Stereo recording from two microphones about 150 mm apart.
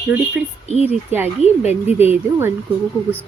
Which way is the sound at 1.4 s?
45° left (ahead or behind).